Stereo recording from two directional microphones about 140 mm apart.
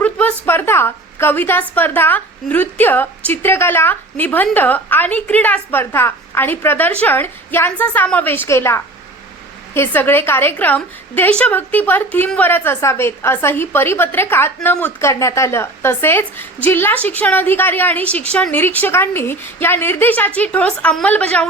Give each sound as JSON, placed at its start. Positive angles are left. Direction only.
{"t": 0.0, "sound": "a woman's voice", "side_deg": 10}